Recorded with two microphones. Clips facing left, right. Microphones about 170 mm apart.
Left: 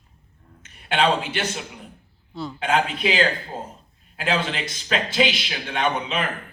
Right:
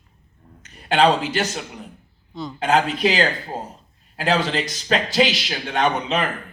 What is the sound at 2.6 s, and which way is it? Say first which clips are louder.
Speech: right 4 dB; 40° right (ahead or behind).